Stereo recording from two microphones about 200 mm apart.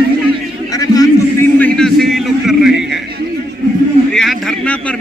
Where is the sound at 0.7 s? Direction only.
20° left (ahead or behind).